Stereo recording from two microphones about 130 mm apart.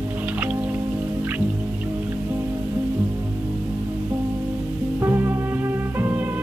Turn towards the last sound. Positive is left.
turn(degrees=-15)  # may be behind; listen again after turning